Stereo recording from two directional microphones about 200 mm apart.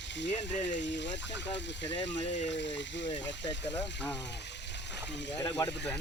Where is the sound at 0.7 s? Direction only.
65° left (ahead or behind).